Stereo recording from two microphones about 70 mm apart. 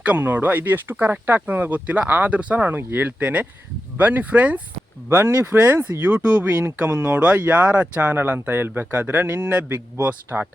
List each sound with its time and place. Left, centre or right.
0.0 s speech: right
5.0 s speech: right